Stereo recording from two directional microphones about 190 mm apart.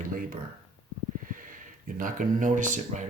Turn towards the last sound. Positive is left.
turn(degrees=-40)  # may be behind; listen again after turning